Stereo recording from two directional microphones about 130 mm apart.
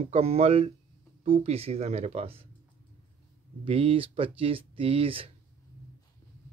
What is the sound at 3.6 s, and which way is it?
Speech, 45° right (ahead or behind).